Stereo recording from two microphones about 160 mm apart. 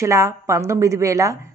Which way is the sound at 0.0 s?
20° right (ahead or behind).